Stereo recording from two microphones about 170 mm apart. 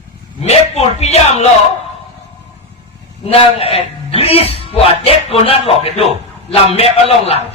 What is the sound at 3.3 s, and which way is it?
A man's voice, 35° left (ahead or behind).